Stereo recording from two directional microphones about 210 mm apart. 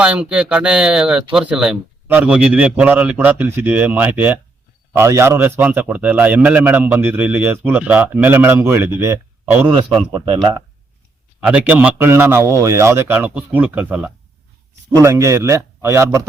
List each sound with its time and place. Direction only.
0.0 s a man's voice: 5° right (ahead or behind)
9.7 s speech: 20° right (ahead or behind)
11.4 s a man's voice: 5° right (ahead or behind)